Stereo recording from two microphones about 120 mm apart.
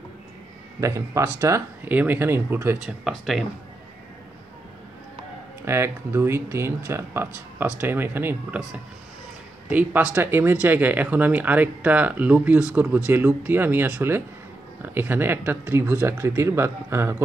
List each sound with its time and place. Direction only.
0.7 s speech: 25° right (ahead or behind)
2.8 s speech: 5° right (ahead or behind)
5.7 s speech: 20° right (ahead or behind)
9.7 s speech: 15° right (ahead or behind)